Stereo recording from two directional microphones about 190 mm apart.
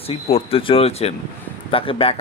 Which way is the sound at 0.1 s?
30° left (ahead or behind).